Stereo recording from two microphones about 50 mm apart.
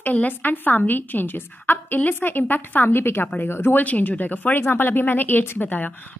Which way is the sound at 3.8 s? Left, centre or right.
Left.